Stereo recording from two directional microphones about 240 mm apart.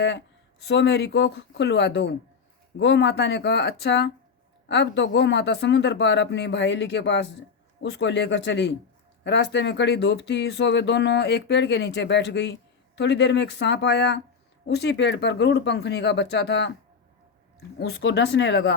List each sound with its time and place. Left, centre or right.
0.6 s speech: left
17.7 s speech: left